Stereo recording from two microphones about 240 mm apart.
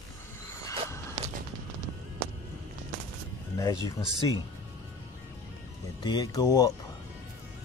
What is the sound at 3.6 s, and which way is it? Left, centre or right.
Speech, centre.